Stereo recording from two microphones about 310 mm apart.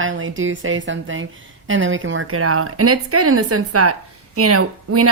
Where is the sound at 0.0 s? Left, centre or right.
Right.